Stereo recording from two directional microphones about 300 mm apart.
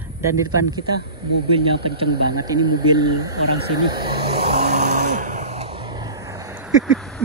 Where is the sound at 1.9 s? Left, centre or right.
Centre.